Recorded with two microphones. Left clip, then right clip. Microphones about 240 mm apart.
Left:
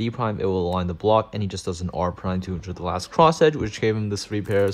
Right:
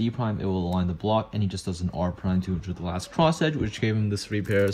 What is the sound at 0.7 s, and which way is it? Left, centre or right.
Speech, right.